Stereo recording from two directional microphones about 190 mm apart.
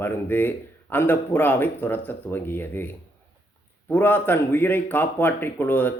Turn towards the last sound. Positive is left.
turn(degrees=10)  # may be behind; listen again after turning